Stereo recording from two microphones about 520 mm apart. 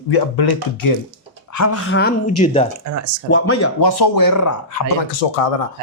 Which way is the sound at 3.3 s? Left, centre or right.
Left.